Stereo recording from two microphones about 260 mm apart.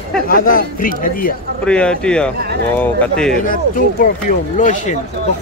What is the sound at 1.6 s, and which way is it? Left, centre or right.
Speech, centre.